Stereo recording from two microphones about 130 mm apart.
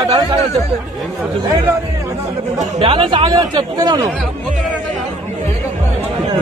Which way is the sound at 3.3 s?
30° right (ahead or behind).